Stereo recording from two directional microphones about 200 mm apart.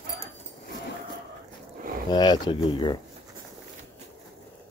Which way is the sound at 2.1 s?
20° left (ahead or behind).